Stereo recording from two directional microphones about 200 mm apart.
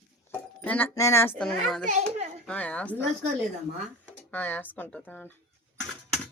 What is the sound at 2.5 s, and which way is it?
Speech, 5° left (ahead or behind).